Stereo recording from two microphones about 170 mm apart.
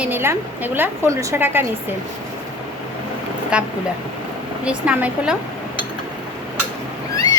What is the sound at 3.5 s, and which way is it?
A woman's voice, 5° right (ahead or behind).